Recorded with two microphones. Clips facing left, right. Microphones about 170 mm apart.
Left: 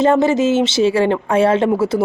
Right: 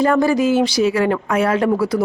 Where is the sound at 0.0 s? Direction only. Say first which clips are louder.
Left 2 dB; 25° left (ahead or behind).